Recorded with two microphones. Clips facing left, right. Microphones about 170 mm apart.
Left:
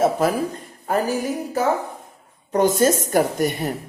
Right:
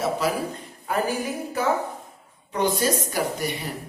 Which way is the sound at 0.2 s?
50° left (ahead or behind).